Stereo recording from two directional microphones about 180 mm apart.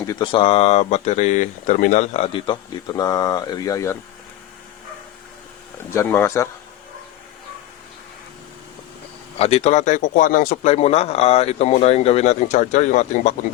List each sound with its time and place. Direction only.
0.0 s speech: 20° left (ahead or behind)
5.9 s speech: 15° left (ahead or behind)
9.4 s a man's voice: 35° left (ahead or behind)